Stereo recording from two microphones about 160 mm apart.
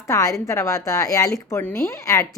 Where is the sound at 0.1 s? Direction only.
20° left (ahead or behind).